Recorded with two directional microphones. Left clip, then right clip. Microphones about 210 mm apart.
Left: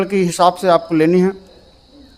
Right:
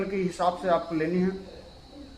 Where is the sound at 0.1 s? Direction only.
50° left (ahead or behind).